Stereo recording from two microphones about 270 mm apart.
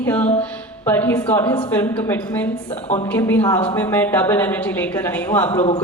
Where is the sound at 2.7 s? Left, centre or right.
Left.